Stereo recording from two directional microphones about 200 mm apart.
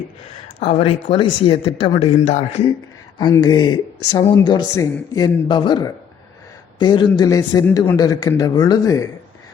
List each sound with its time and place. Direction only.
0.6 s a man's voice: 30° left (ahead or behind)
3.2 s a man's voice: 20° left (ahead or behind)